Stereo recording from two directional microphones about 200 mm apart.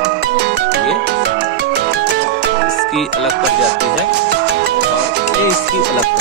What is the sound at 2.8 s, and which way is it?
Music, centre (ahead or behind).